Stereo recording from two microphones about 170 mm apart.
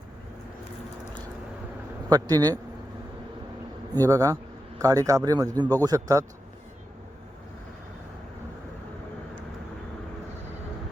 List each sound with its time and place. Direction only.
2.0 s a man's voice: 20° right (ahead or behind)
3.9 s a man's voice: 20° right (ahead or behind)